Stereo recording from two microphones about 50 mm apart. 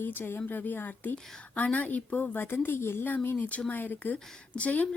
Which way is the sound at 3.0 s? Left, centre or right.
Left.